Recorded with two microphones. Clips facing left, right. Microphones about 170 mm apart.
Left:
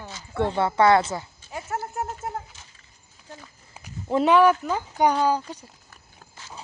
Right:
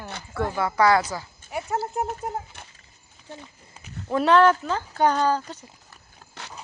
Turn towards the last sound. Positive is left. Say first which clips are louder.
# right 3 dB
turn(degrees=-75)  # may be behind; listen again after turning